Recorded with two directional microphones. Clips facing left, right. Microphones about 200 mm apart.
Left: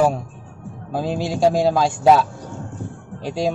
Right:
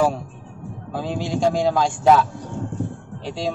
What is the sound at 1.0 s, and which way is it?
Speech, 10° left (ahead or behind).